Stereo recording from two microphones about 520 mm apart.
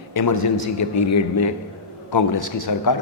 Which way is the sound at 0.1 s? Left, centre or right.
Left.